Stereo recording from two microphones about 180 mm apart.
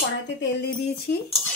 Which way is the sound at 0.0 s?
75° left (ahead or behind).